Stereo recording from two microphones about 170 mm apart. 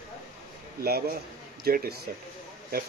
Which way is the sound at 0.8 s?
65° right (ahead or behind).